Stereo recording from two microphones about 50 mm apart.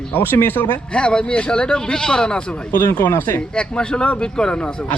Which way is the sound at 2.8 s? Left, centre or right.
Left.